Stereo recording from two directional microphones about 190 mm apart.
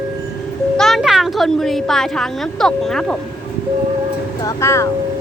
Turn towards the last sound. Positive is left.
turn(degrees=15)  # may be behind; listen again after turning